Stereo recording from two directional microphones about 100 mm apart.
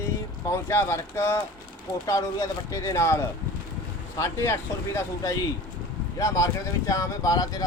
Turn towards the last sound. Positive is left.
turn(degrees=40)  # may be behind; listen again after turning